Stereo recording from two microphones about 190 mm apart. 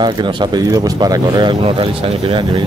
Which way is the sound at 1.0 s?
20° right (ahead or behind).